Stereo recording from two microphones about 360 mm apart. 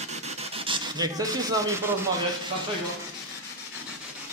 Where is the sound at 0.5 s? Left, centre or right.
Centre.